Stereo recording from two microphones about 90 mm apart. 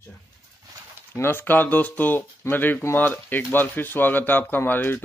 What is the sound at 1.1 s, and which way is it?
Speech, 25° left (ahead or behind).